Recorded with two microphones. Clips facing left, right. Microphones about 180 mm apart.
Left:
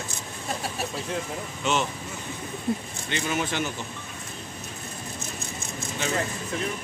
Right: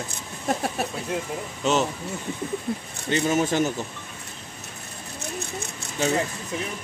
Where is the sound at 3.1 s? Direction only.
40° right (ahead or behind).